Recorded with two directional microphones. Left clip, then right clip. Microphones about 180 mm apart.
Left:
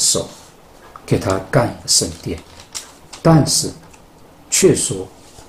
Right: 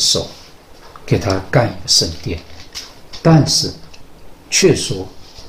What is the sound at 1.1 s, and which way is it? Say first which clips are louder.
Speech: right 1 dB; 15° left (ahead or behind).